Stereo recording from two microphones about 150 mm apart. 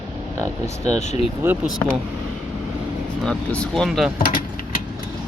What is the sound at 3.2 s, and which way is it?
Speech, 5° left (ahead or behind).